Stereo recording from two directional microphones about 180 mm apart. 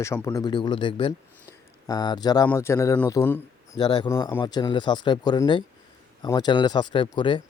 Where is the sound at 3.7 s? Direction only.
25° left (ahead or behind).